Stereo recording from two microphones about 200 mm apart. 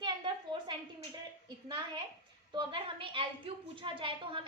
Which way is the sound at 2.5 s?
25° right (ahead or behind).